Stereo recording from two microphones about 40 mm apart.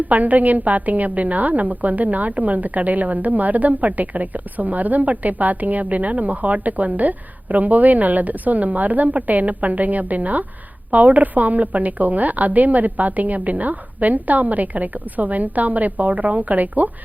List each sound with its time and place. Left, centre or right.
0.1 s a woman's voice: right